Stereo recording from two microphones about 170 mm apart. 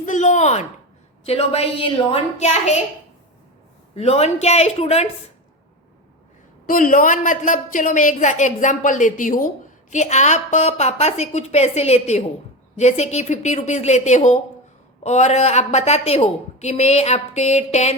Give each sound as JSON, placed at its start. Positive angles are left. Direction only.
{"t": 0.0, "sound": "a woman's voice", "side_deg": 45}
{"t": 3.9, "sound": "a woman's voice", "side_deg": 40}
{"t": 6.7, "sound": "a woman's voice", "side_deg": 55}